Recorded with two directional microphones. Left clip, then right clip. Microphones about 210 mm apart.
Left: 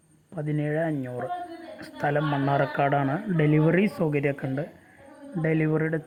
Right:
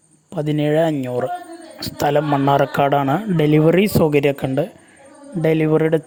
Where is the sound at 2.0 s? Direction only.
50° right (ahead or behind).